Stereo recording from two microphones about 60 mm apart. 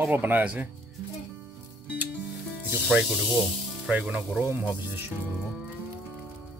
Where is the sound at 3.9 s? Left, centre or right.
Centre.